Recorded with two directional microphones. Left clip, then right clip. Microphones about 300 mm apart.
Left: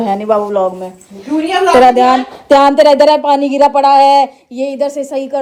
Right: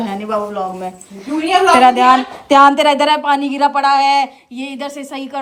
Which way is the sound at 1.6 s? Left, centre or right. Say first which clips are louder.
Left 2 dB; right.